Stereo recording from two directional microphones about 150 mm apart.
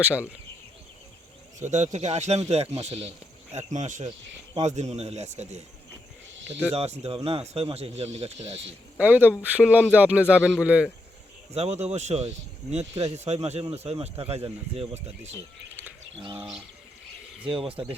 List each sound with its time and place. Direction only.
0.0 s speech: 10° right (ahead or behind)
1.5 s speech: 50° right (ahead or behind)
6.7 s speech: 45° right (ahead or behind)
9.0 s speech: 10° right (ahead or behind)
11.5 s speech: 45° right (ahead or behind)
16.2 s speech: 35° right (ahead or behind)